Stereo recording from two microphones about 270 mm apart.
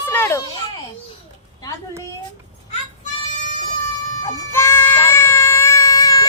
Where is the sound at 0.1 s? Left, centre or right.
Centre.